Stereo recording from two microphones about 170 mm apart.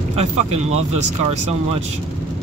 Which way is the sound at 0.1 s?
40° right (ahead or behind).